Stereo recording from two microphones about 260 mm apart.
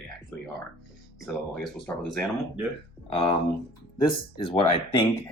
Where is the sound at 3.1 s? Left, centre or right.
Centre.